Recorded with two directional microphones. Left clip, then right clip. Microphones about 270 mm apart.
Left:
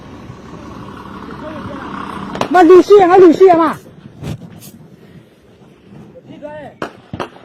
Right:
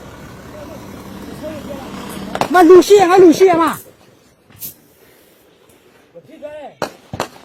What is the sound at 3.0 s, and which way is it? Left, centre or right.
Speech, right.